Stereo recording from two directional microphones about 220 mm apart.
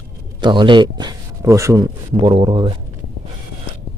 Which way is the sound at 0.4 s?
20° right (ahead or behind).